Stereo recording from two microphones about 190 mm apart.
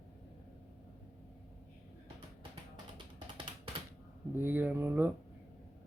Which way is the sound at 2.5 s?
25° right (ahead or behind).